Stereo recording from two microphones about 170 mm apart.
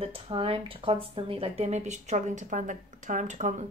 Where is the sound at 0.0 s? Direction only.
35° right (ahead or behind).